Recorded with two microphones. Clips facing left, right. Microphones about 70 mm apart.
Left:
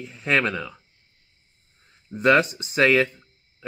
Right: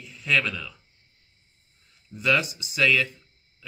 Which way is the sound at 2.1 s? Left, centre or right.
Left.